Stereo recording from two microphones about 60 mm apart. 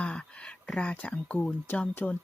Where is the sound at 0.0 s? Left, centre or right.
Centre.